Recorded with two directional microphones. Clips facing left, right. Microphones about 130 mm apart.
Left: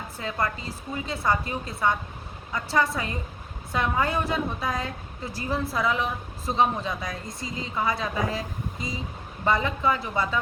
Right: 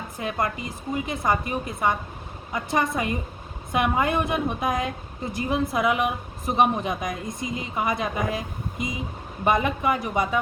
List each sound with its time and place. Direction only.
0.2 s a woman's voice: 20° right (ahead or behind)